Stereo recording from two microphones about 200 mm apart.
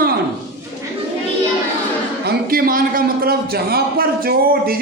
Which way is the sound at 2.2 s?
45° right (ahead or behind).